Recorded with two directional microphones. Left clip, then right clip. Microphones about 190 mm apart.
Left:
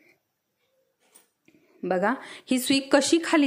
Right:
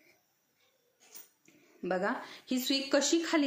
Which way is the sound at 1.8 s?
50° left (ahead or behind).